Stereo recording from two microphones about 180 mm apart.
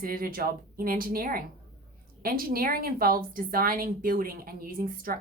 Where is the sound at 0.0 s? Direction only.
50° right (ahead or behind).